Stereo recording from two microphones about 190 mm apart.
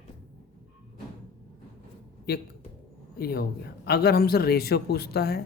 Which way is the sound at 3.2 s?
55° left (ahead or behind).